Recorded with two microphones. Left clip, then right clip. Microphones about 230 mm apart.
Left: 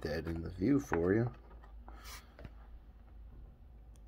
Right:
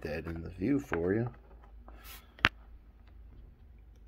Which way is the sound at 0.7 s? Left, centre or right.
Centre.